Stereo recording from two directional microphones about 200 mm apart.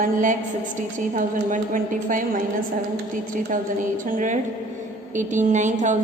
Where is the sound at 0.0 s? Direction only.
40° right (ahead or behind).